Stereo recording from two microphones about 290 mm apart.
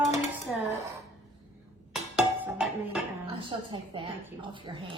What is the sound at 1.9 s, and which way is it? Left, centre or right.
Music, centre.